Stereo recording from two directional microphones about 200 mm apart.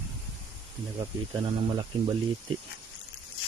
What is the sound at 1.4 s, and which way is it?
Speech, 25° right (ahead or behind).